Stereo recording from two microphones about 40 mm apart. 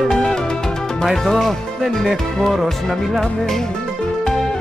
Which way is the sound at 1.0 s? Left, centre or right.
Centre.